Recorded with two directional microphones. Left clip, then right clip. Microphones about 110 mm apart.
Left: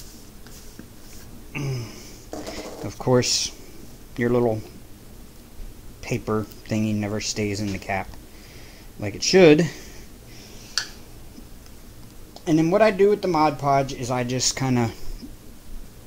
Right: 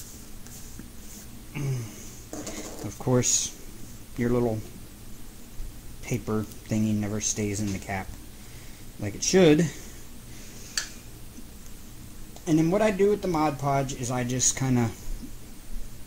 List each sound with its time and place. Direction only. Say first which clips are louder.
1.5 s a sound: left 5 dB; 20° left (ahead or behind)
2.5 s pigeon: left 4 dB; 30° left (ahead or behind)
4.2 s speech: left 5 dB; 35° left (ahead or behind)
6.0 s speech: left 5 dB; 30° left (ahead or behind)
9.0 s speech: left 6 dB; 25° left (ahead or behind)
12.4 s speech: left 5 dB; 25° left (ahead or behind)